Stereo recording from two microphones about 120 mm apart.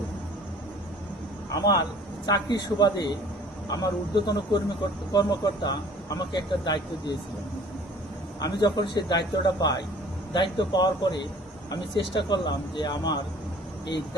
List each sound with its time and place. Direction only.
1.5 s speech: 30° left (ahead or behind)
8.4 s speech: 30° left (ahead or behind)